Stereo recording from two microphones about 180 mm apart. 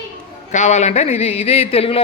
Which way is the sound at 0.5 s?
40° left (ahead or behind).